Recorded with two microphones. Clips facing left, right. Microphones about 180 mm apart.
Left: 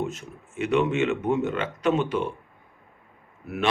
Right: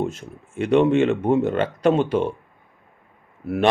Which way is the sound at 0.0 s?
30° right (ahead or behind).